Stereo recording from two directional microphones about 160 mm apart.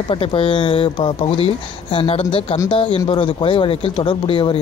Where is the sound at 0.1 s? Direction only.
35° left (ahead or behind).